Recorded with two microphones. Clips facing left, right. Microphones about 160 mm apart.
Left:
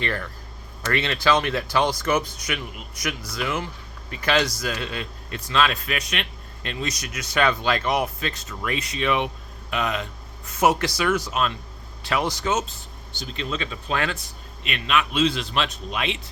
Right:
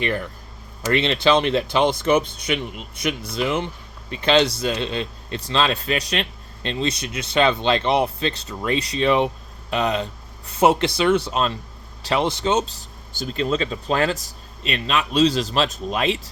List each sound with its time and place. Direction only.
0.0 s a man's voice: 15° right (ahead or behind)
13.1 s a man's voice: 45° right (ahead or behind)